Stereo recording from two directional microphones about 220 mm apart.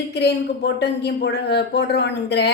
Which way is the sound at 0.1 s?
50° left (ahead or behind).